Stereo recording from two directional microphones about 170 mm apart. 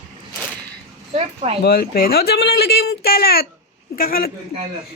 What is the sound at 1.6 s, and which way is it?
Speech, 60° left (ahead or behind).